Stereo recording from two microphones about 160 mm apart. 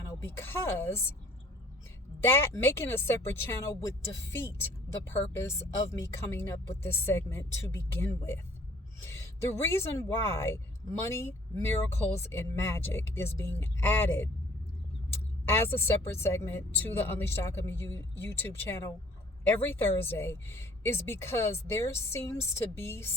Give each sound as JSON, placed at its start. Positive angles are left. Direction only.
{"t": 0.1, "sound": "speech", "side_deg": 15}
{"t": 2.2, "sound": "speech", "side_deg": 15}
{"t": 5.0, "sound": "speech", "side_deg": 15}
{"t": 15.5, "sound": "speech", "side_deg": 15}